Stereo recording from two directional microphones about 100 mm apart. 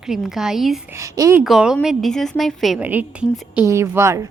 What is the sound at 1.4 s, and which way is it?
A woman's voice, 5° right (ahead or behind).